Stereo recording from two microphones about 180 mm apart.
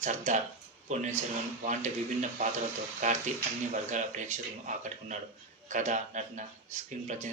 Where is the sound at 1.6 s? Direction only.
40° right (ahead or behind).